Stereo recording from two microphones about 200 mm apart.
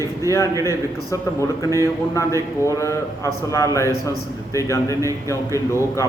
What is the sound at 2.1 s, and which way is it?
A man's voice, 15° left (ahead or behind).